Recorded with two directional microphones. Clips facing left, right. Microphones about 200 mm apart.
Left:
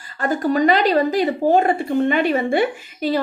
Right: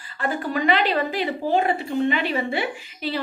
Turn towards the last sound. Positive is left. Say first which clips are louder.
# left 7 dB
turn(degrees=45)  # may be behind; listen again after turning